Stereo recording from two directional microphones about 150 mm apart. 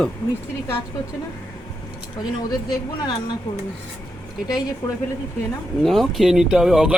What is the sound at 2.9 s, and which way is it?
Speech, 30° left (ahead or behind).